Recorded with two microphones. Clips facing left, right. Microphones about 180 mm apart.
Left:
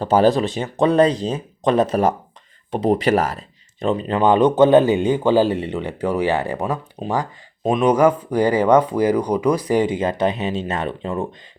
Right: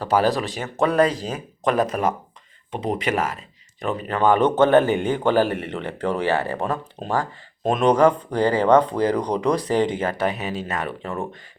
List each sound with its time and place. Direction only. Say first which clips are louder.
0.0 s speech: left 5 dB; 25° left (ahead or behind)
3.8 s speech: left 3 dB; 20° left (ahead or behind)
7.0 s speech: left 1 dB; centre (ahead or behind); by 11.3 s 20° left (ahead or behind)